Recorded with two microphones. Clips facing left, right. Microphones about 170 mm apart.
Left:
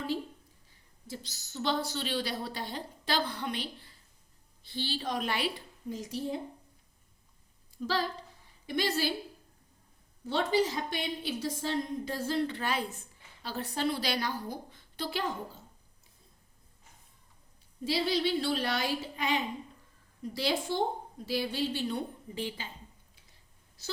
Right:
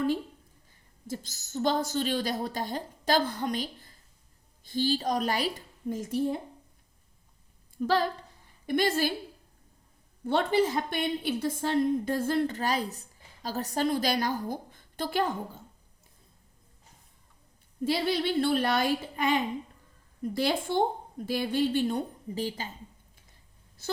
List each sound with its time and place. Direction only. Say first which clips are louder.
1.0 s a woman's voice: right 6 dB; 45° right (ahead or behind)
7.8 s a woman's voice: right 6 dB; 55° right (ahead or behind)
10.2 s a woman's voice: right 3 dB; 55° right (ahead or behind)
17.8 s a woman's voice: right 2 dB; 55° right (ahead or behind)
23.8 s speech: right 6 dB; 55° right (ahead or behind)